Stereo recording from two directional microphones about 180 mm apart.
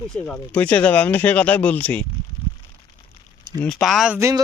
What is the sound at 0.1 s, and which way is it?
Speech, 5° left (ahead or behind).